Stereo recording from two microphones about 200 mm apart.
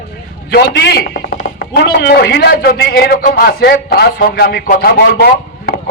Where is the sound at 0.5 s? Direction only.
55° left (ahead or behind).